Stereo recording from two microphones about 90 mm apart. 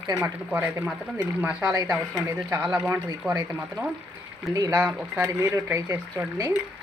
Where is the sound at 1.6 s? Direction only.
45° right (ahead or behind).